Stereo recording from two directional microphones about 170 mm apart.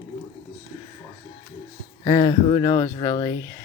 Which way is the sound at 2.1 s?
20° left (ahead or behind).